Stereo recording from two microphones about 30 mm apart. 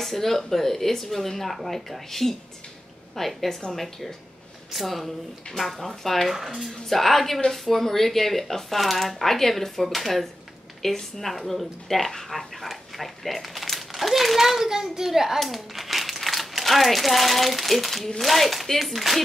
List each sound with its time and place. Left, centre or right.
0.0 s speech: centre
14.6 s a child's voice: centre
15.5 s speech: centre